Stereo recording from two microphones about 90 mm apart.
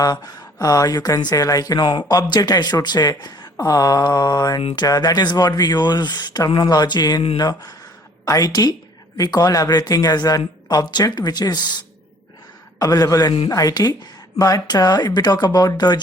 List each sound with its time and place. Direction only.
0.0 s speech: 50° left (ahead or behind)
12.8 s speech: 40° left (ahead or behind)